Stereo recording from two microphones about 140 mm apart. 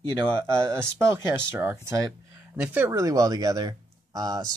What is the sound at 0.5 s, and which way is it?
Speech, 20° right (ahead or behind).